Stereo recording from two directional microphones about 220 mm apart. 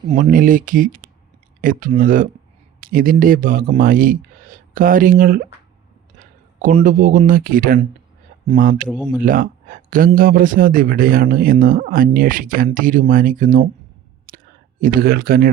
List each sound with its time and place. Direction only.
0.1 s speech: 35° right (ahead or behind)
14.3 s clicking: 40° right (ahead or behind)